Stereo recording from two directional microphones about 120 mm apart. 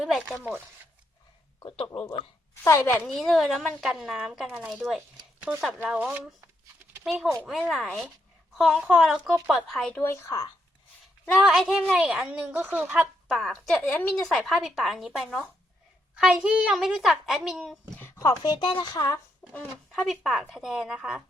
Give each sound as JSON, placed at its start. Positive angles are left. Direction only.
{"t": 0.0, "sound": "a child's voice", "side_deg": 0}
{"t": 1.5, "sound": "speech", "side_deg": 50}
{"t": 2.6, "sound": "speech", "side_deg": 20}
{"t": 3.1, "sound": "a child's voice", "side_deg": 5}
{"t": 7.0, "sound": "a child's voice", "side_deg": 0}
{"t": 10.0, "sound": "speech", "side_deg": 25}
{"t": 11.3, "sound": "a woman's voice", "side_deg": 0}
{"t": 13.5, "sound": "a woman's voice", "side_deg": 10}
{"t": 18.2, "sound": "speech", "side_deg": 35}
{"t": 19.4, "sound": "a sound", "side_deg": 15}
{"t": 19.9, "sound": "a child's voice", "side_deg": 0}